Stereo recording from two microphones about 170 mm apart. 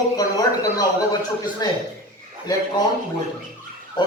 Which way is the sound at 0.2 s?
20° left (ahead or behind).